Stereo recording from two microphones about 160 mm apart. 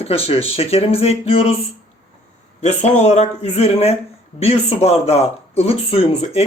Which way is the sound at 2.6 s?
45° left (ahead or behind).